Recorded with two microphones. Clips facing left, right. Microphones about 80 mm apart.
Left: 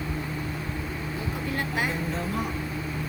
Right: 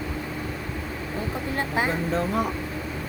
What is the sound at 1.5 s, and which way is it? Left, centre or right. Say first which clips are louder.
Speech: right 4 dB; right.